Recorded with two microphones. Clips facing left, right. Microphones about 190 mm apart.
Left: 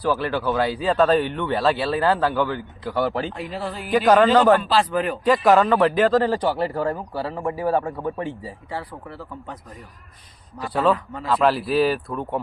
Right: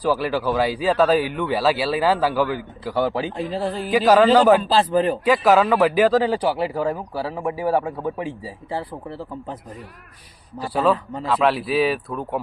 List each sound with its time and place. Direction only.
0.0 s a man's voice: 10° right (ahead or behind)
3.3 s speech: 30° right (ahead or behind)
3.9 s a man's voice: 10° right (ahead or behind)
4.6 s speech: 30° right (ahead or behind)
5.2 s a man's voice: centre (ahead or behind)
8.7 s speech: 30° right (ahead or behind)
10.9 s speech: 30° right (ahead or behind)
11.3 s speech: centre (ahead or behind)